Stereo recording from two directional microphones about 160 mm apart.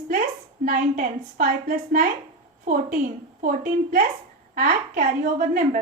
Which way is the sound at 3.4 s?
60° right (ahead or behind).